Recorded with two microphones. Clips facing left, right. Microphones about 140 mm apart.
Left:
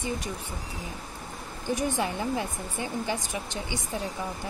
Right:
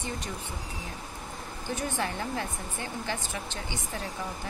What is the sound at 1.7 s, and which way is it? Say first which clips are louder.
Speech: left 4 dB; 15° left (ahead or behind).